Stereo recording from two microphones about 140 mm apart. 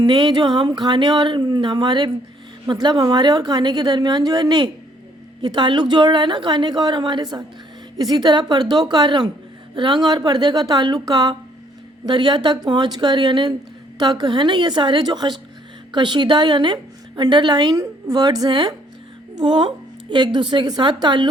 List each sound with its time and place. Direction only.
0.0 s a woman's voice: 30° right (ahead or behind)